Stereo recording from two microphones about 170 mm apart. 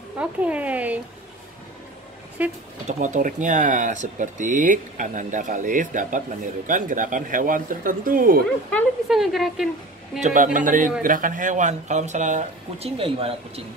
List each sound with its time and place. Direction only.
0.2 s speech: 10° right (ahead or behind)
2.4 s speech: 10° right (ahead or behind)
2.9 s speech: 45° right (ahead or behind)
9.1 s a woman's voice: centre (ahead or behind)
10.2 s speech: 50° right (ahead or behind); by 13.3 s 35° right (ahead or behind)